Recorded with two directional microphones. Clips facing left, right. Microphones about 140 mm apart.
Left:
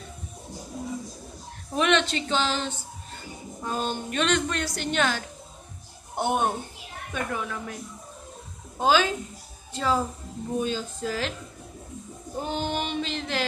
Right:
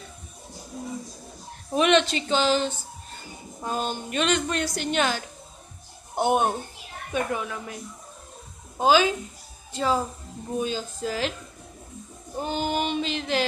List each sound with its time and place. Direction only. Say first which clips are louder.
1.7 s a woman's voice: right 3 dB; 15° right (ahead or behind)
3.6 s a woman's voice: even; 10° right (ahead or behind)
8.7 s a woman's voice: right 2 dB; 10° right (ahead or behind)
12.4 s a woman's voice: right 2 dB; 5° right (ahead or behind)